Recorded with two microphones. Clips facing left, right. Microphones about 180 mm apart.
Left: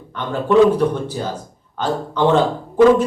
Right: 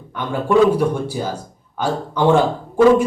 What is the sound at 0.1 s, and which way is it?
Speech, 10° right (ahead or behind).